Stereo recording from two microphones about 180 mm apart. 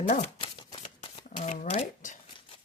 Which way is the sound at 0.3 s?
25° left (ahead or behind).